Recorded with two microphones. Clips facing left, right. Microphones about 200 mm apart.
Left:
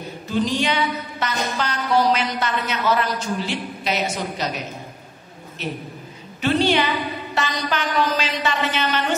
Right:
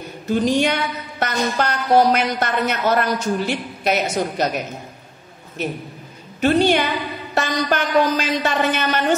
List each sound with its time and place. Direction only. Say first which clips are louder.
0.3 s a woman's voice: right 4 dB; 50° right (ahead or behind)
6.4 s a woman's voice: right 3 dB; 50° right (ahead or behind)